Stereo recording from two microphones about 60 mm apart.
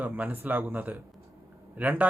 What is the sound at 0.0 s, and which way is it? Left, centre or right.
Speech, right.